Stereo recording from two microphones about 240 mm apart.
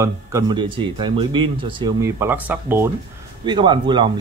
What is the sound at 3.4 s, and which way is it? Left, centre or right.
Speech, centre.